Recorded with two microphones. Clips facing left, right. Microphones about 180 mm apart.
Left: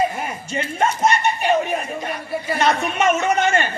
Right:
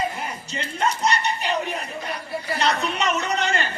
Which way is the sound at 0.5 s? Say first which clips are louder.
Left 4 dB; 55° left (ahead or behind).